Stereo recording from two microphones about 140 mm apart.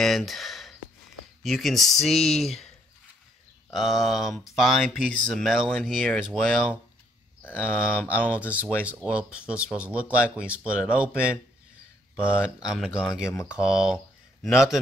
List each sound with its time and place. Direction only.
0.0 s a sound: centre (ahead or behind)
1.4 s speech: centre (ahead or behind)
3.7 s speech: centre (ahead or behind)
7.4 s speech: 15° left (ahead or behind)
8.1 s speech: 10° right (ahead or behind)
13.1 s speech: 20° left (ahead or behind)
13.6 s speech: 5° right (ahead or behind)